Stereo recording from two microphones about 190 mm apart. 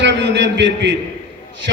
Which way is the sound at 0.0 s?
70° right (ahead or behind).